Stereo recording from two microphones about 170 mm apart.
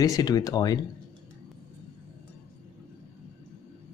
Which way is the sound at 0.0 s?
20° left (ahead or behind).